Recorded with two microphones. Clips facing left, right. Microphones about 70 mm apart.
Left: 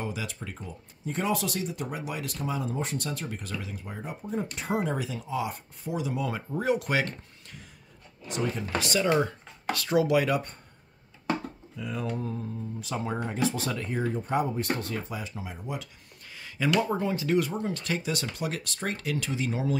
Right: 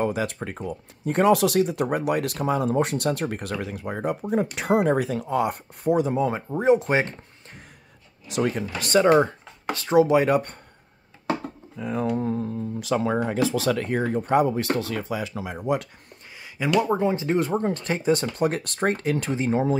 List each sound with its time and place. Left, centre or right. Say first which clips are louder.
0.0 s speech: right 10 dB; right
8.3 s speech: right 5 dB; right
8.8 s speech: right 9 dB; right
9.1 s speech: right 7 dB; right
10.3 s speech: right 6 dB; right
11.7 s speech: right 7 dB; right
12.2 s speech: right 8 dB; right
12.8 s speech: right 9 dB; right
16.3 s speech: right 3 dB; centre
17.5 s speech: right 6 dB; right